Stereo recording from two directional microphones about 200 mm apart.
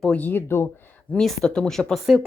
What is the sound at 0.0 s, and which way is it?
Speech, 5° left (ahead or behind).